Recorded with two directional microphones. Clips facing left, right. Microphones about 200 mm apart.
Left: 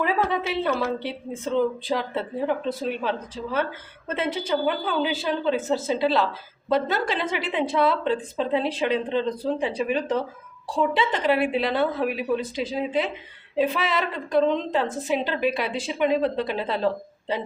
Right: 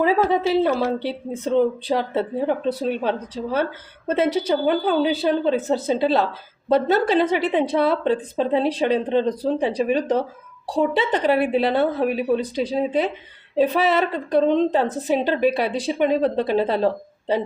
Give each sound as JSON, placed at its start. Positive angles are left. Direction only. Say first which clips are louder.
{"t": 0.0, "sound": "a woman's voice", "louder": "right 6 dB", "side_deg": -30}